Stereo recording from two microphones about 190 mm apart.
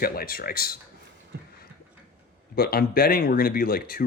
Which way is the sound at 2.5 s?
50° left (ahead or behind).